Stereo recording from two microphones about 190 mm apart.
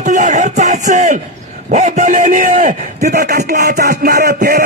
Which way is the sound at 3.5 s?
60° right (ahead or behind).